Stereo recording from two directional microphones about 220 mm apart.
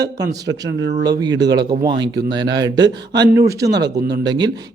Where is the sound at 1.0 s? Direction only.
15° right (ahead or behind).